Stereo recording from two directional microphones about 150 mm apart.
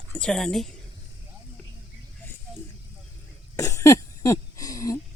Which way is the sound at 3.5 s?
20° left (ahead or behind).